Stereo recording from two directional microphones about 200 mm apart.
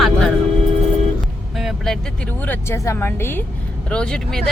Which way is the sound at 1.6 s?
Centre (ahead or behind).